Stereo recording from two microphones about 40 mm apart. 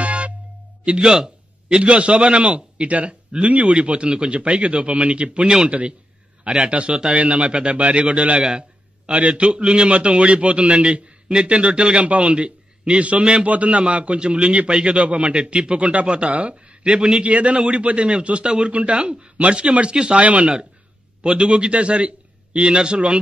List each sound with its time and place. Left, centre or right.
0.0 s music: right
0.8 s a man's voice: right
16.8 s a man's voice: centre
17.2 s a man's voice: right